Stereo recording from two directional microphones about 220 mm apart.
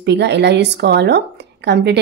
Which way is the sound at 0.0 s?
50° right (ahead or behind).